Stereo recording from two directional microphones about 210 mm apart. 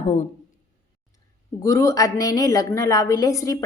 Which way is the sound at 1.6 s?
15° left (ahead or behind).